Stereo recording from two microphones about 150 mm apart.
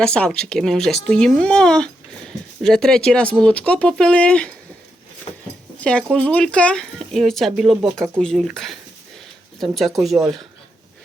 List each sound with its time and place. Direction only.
0.0 s speech: 5° left (ahead or behind)
5.8 s speech: 5° left (ahead or behind)